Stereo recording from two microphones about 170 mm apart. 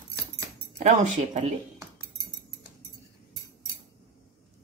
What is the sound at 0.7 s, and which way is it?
Speech, 40° right (ahead or behind).